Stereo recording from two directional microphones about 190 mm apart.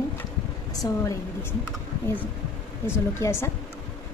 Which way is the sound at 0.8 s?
15° left (ahead or behind).